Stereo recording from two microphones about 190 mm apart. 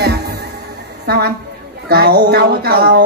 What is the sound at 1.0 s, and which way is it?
A woman's voice, 60° right (ahead or behind).